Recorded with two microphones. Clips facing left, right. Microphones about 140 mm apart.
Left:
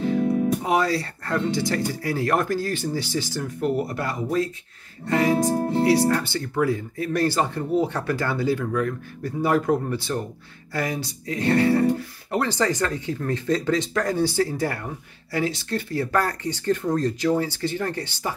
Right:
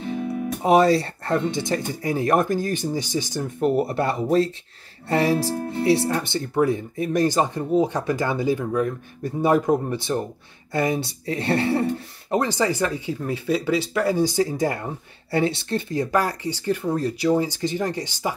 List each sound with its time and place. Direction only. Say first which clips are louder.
0.6 s speech: right 6 dB; 25° right (ahead or behind)
5.5 s speech: left 4 dB; 45° left (ahead or behind)
6.0 s speech: left 2 dB; 20° right (ahead or behind)